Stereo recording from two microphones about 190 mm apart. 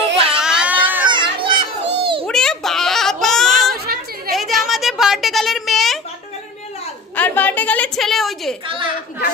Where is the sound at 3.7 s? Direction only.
55° right (ahead or behind).